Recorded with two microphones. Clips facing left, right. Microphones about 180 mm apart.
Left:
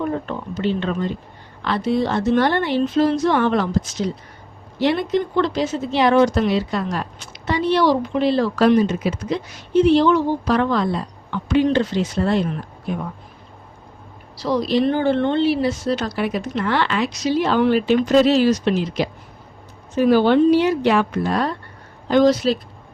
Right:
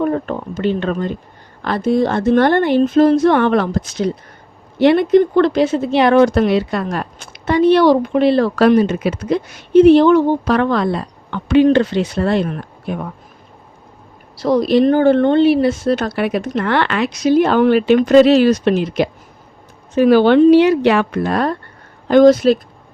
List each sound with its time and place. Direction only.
0.0 s a woman's voice: 50° right (ahead or behind)
14.3 s a woman's voice: 50° right (ahead or behind)
20.0 s a woman's voice: 75° right (ahead or behind); by 22.5 s 50° right (ahead or behind)